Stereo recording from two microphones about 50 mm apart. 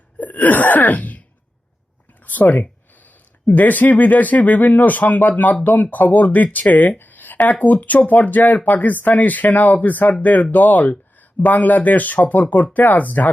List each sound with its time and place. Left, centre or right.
0.2 s wail: left
2.2 s speech: left